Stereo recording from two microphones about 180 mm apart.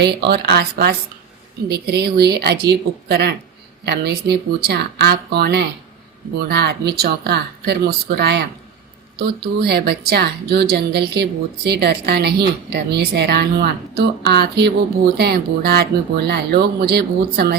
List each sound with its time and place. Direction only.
0.0 s a woman's voice: 65° right (ahead or behind)